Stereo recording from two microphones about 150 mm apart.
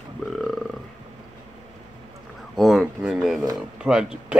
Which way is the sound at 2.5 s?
Centre (ahead or behind).